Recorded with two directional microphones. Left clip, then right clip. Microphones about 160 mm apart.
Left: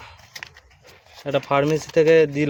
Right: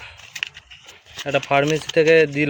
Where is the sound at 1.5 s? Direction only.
15° left (ahead or behind).